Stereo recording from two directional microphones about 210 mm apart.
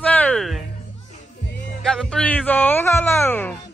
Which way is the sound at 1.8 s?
5° left (ahead or behind).